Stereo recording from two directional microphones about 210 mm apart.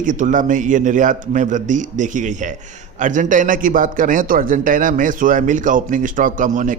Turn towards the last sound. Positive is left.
turn(degrees=-35)  # may be behind; listen again after turning